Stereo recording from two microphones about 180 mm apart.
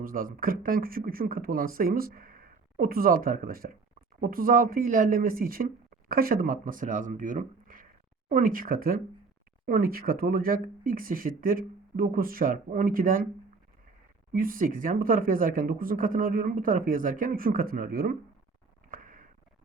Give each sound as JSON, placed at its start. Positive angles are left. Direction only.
{"t": 0.0, "sound": "speech", "side_deg": -50}
{"t": 14.3, "sound": "speech", "side_deg": -50}
{"t": 18.9, "sound": "a sound", "side_deg": -50}